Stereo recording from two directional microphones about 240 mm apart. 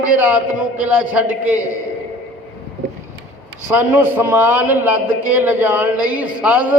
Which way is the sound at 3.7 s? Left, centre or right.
Centre.